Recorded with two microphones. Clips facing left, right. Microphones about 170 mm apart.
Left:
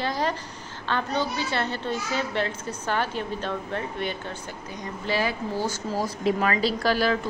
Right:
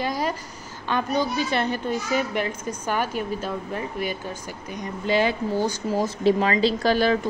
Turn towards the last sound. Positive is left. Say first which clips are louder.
# right 3 dB
turn(degrees=-20)  # may be behind; listen again after turning